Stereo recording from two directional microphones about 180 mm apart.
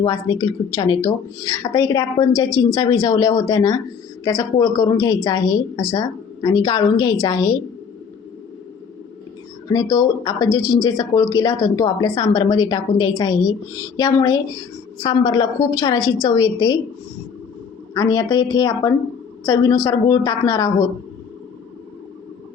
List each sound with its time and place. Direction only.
0.0 s a woman's voice: 20° left (ahead or behind)
9.6 s a woman's voice: 20° left (ahead or behind)
17.9 s a woman's voice: 20° left (ahead or behind)